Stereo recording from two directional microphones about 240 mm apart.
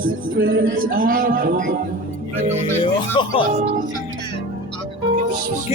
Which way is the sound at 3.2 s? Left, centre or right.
Centre.